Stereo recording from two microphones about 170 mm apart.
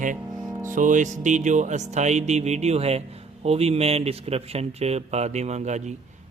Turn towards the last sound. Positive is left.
turn(degrees=-40)  # may be behind; listen again after turning